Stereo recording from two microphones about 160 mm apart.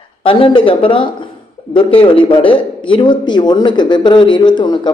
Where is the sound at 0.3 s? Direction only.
35° left (ahead or behind).